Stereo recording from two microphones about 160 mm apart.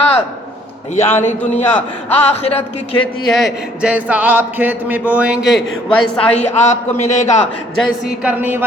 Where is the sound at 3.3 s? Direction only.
5° right (ahead or behind).